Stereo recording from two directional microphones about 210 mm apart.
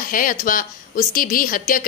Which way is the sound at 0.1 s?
40° left (ahead or behind).